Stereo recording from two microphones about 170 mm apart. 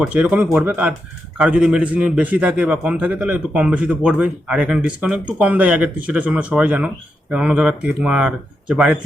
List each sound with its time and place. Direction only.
0.0 s a man's voice: 10° right (ahead or behind)